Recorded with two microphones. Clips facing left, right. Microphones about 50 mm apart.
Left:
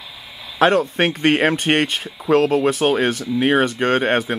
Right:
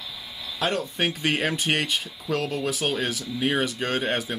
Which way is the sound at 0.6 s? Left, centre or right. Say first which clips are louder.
Left 10 dB; left.